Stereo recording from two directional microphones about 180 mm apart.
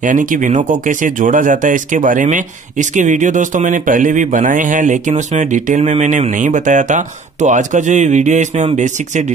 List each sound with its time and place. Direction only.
0.0 s speech: 45° right (ahead or behind)